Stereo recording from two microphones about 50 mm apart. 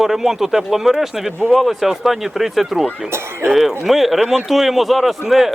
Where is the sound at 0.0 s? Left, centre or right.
Centre.